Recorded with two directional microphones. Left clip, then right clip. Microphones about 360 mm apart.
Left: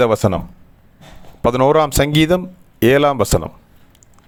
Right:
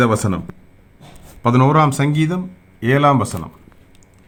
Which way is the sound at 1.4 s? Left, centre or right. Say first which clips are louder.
Left 2 dB; left.